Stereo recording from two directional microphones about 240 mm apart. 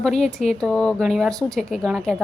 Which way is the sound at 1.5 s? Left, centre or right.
Centre.